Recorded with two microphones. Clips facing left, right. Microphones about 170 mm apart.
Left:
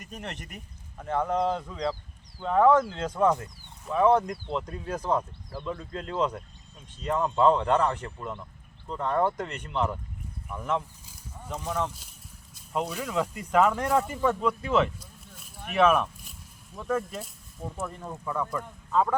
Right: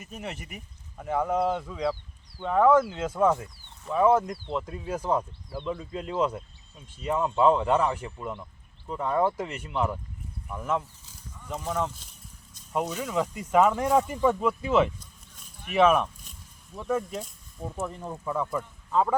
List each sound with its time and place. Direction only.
0.0 s speech: 5° right (ahead or behind)
17.7 s speech: 15° right (ahead or behind)